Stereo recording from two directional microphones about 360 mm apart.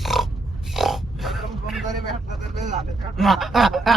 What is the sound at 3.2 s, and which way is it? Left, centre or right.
Snicker, centre.